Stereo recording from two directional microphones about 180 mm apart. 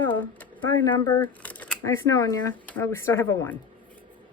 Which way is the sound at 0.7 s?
20° left (ahead or behind).